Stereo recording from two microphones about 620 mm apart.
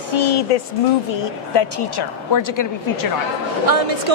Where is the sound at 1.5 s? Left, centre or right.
Left.